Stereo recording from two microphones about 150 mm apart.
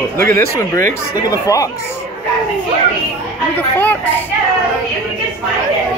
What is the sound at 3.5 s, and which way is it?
Speech, 10° left (ahead or behind).